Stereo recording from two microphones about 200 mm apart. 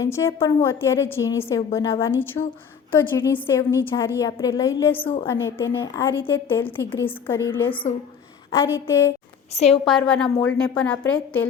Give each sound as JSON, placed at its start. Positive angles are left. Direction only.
{"t": 0.0, "sound": "a woman's voice", "side_deg": 15}
{"t": 5.0, "sound": "a woman's voice", "side_deg": 25}
{"t": 5.3, "sound": "a woman's voice", "side_deg": 15}
{"t": 9.6, "sound": "a woman's voice", "side_deg": 30}
{"t": 9.8, "sound": "a woman's voice", "side_deg": 5}